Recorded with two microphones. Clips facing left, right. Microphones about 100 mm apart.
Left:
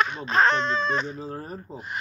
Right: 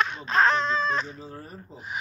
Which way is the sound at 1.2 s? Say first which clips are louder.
Left 6 dB; 45° left (ahead or behind).